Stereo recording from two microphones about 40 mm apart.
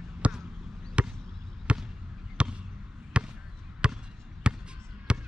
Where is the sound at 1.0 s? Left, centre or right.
Right.